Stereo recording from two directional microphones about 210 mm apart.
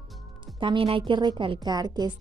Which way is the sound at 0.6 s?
25° right (ahead or behind).